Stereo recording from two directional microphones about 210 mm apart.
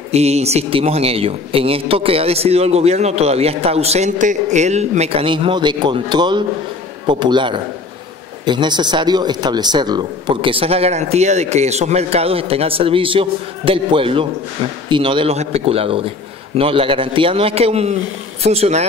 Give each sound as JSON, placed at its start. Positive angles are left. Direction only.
{"t": 0.1, "sound": "speech", "side_deg": -30}